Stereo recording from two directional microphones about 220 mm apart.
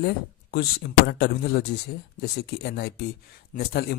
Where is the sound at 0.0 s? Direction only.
45° left (ahead or behind).